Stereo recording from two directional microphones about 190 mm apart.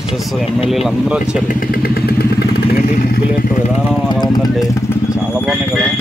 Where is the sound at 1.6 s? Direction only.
50° left (ahead or behind).